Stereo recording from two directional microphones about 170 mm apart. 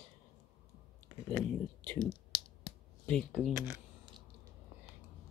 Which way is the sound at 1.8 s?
10° left (ahead or behind).